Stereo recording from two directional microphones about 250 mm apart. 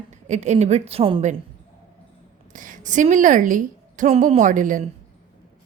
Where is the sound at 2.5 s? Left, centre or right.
Right.